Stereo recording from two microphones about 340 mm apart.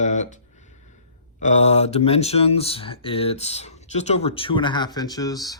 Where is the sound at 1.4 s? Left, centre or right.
Centre.